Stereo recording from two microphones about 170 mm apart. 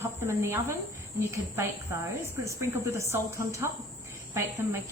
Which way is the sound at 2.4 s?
15° right (ahead or behind).